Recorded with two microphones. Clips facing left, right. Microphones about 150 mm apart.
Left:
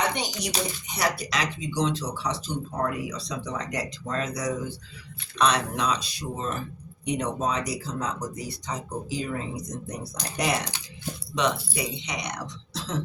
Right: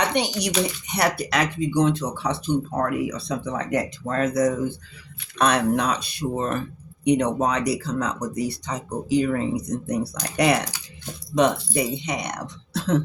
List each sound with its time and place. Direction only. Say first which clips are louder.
0.1 s speech: right 7 dB; 70° right (ahead or behind)
11.3 s speech: right 7 dB; 50° right (ahead or behind)